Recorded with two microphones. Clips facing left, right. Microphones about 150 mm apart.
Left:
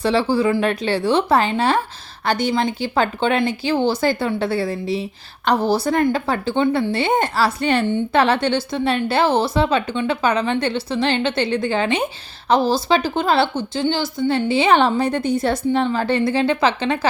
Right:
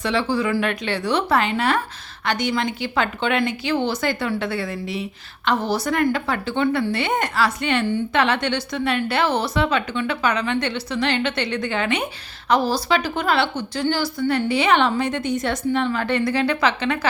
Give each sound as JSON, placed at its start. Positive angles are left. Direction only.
{"t": 0.0, "sound": "a woman's voice", "side_deg": 35}